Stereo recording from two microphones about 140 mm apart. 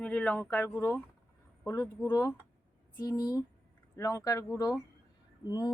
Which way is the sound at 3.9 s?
25° left (ahead or behind).